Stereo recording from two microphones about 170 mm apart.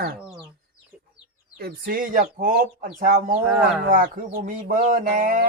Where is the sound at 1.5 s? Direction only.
65° right (ahead or behind).